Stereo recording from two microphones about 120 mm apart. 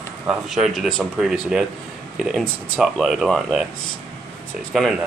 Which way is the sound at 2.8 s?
Centre (ahead or behind).